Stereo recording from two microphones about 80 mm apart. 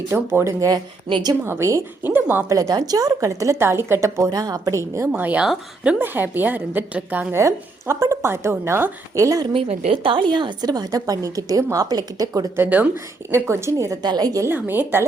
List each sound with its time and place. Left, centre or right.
0.1 s a woman's voice: right
2.0 s a woman's voice: right
2.5 s a woman's voice: right
5.2 s a woman's voice: centre
7.3 s a woman's voice: right
10.0 s a woman's voice: right
12.6 s a woman's voice: centre
13.3 s a woman's voice: right
14.0 s a woman's voice: right
14.4 s a woman's voice: right